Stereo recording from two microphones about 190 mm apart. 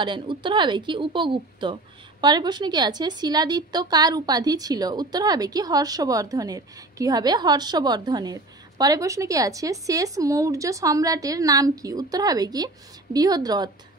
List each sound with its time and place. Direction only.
0.0 s a woman's voice: 25° right (ahead or behind)